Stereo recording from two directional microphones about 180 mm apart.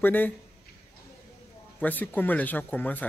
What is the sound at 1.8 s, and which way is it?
Speech, 10° left (ahead or behind).